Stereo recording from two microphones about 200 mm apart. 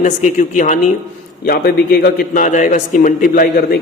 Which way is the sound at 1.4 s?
50° left (ahead or behind).